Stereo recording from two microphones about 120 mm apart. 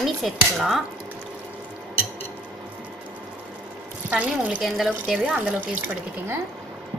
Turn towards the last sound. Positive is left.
turn(degrees=-15)  # may be behind; listen again after turning